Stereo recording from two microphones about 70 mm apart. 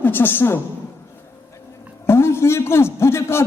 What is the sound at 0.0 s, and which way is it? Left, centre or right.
Speech, left.